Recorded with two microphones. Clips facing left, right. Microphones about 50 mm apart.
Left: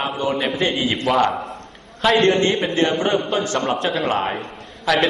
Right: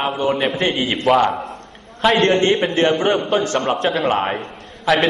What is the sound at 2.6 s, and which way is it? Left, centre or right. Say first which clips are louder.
A man's voice: right 3 dB; right.